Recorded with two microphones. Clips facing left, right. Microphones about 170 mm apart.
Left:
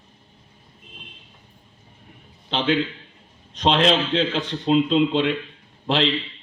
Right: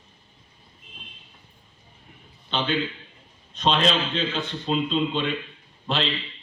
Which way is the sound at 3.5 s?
90° left.